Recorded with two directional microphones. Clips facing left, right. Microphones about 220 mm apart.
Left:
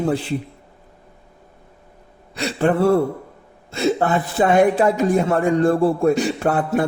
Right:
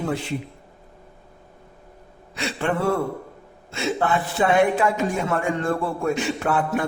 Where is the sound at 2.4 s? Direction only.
40° left (ahead or behind).